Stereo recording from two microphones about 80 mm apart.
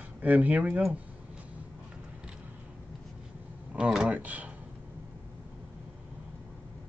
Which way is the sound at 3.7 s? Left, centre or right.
Right.